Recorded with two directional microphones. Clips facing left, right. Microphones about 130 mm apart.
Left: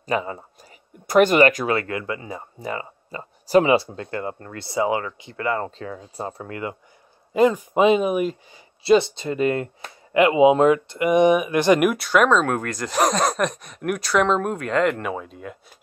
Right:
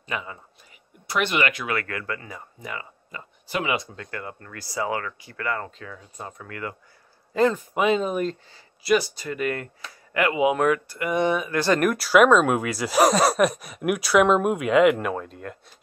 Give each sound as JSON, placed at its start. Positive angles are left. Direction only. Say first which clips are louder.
{"t": 0.0, "sound": "speech", "louder": "left 8 dB", "side_deg": 35}
{"t": 1.8, "sound": "speech", "louder": "left 4 dB", "side_deg": 20}
{"t": 8.8, "sound": "speech", "louder": "left 5 dB", "side_deg": 25}
{"t": 12.0, "sound": "speech", "louder": "right 2 dB", "side_deg": -5}